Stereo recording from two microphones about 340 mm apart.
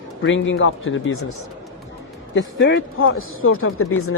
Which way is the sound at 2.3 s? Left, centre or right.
Left.